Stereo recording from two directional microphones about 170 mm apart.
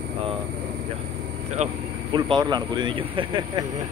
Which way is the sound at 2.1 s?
25° right (ahead or behind).